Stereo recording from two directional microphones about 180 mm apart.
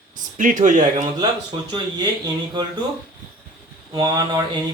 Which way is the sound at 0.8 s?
20° right (ahead or behind).